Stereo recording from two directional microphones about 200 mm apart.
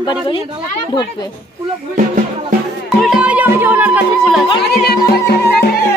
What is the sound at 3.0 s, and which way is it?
Music, 5° right (ahead or behind).